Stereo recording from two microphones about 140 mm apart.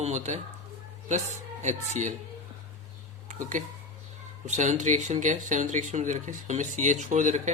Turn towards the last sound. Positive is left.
turn(degrees=-60)  # may be behind; listen again after turning